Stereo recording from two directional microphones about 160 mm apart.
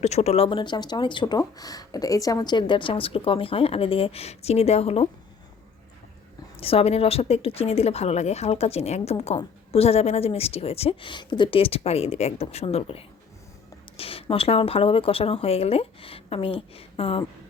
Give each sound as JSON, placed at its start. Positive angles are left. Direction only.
{"t": 0.0, "sound": "speech", "side_deg": 45}
{"t": 6.6, "sound": "speech", "side_deg": 35}